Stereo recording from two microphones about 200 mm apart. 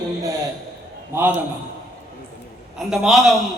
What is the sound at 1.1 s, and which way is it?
Speech, 10° right (ahead or behind).